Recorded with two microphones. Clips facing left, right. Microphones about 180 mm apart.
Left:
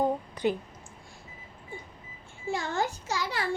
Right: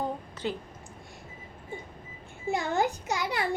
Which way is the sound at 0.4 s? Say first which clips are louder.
Left 5 dB; 15° left (ahead or behind).